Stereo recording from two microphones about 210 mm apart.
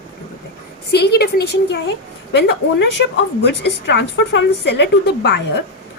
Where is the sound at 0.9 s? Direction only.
50° left (ahead or behind).